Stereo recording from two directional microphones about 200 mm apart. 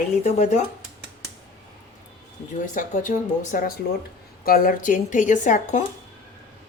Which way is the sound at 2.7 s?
40° left (ahead or behind).